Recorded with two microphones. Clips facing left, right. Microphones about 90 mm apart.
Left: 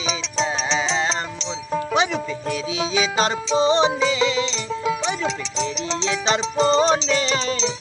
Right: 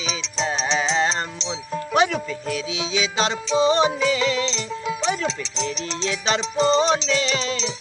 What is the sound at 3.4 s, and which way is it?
Speech, 30° left (ahead or behind).